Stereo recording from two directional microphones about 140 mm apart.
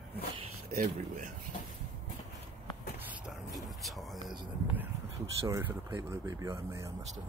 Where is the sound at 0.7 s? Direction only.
65° right (ahead or behind).